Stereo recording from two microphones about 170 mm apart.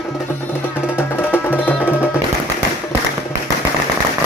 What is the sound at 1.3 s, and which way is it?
Music, 10° left (ahead or behind).